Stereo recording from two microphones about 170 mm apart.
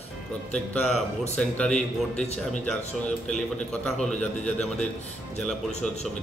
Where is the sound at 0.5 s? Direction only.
5° left (ahead or behind).